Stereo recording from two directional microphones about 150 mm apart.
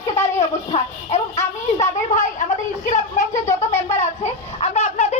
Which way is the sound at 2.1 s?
55° left (ahead or behind).